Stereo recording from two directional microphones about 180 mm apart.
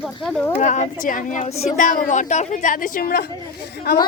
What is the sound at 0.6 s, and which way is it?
A woman's voice, 40° left (ahead or behind).